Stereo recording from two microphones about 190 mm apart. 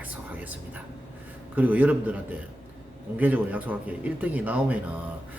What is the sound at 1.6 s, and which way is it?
Speech, 10° right (ahead or behind).